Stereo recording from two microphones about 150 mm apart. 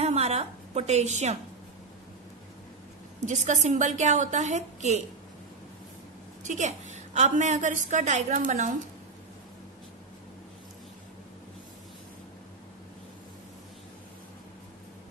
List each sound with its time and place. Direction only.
0.0 s a woman's voice: 45° right (ahead or behind)
3.3 s a woman's voice: 50° right (ahead or behind)
6.4 s a woman's voice: 50° right (ahead or behind)